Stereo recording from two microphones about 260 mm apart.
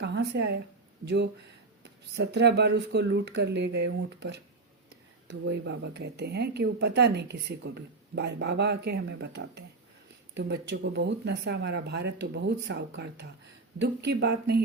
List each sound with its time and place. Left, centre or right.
0.0 s speech: right
1.8 s speech: right